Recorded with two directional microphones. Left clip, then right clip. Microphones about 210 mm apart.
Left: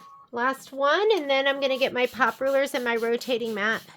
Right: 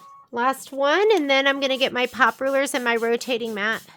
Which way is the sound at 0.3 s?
55° right (ahead or behind).